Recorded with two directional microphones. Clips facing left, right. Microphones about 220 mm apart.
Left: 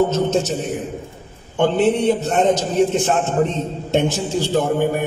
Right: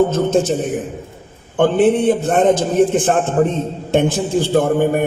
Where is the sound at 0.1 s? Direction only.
55° right (ahead or behind).